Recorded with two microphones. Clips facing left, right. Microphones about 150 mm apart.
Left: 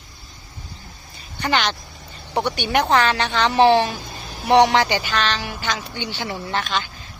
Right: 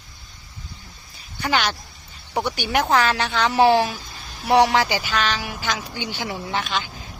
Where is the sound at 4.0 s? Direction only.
55° left (ahead or behind).